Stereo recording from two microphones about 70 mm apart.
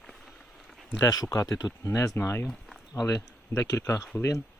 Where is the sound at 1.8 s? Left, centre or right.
Left.